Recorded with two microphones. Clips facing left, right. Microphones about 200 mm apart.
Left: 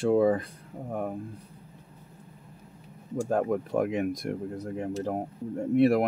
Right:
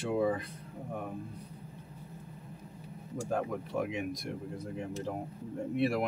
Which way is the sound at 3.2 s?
50° left (ahead or behind).